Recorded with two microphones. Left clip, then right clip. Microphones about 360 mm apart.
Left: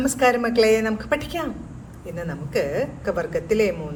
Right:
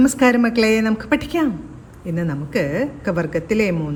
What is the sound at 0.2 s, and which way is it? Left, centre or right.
A man's voice, right.